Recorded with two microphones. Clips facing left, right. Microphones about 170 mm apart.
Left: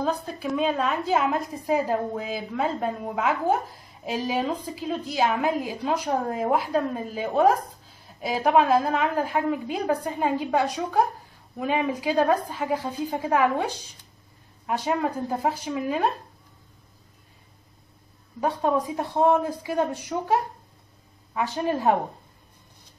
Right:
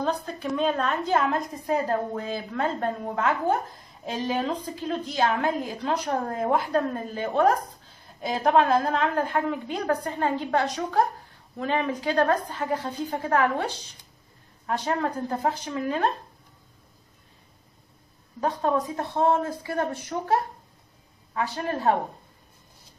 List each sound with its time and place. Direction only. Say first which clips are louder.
0.0 s a woman's voice: left 1 dB; 5° left (ahead or behind)
14.7 s a woman's voice: left 1 dB; 10° left (ahead or behind)
18.4 s a woman's voice: left 1 dB; 10° left (ahead or behind)